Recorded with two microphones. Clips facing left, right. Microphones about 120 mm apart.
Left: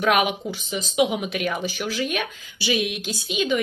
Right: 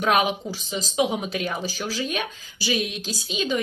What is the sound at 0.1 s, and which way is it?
Speech, 30° right (ahead or behind).